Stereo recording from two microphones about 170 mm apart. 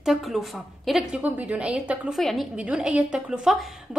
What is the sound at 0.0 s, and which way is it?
A woman's voice, centre (ahead or behind).